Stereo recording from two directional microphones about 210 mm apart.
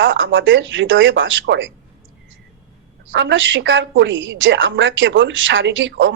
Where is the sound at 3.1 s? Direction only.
65° right (ahead or behind).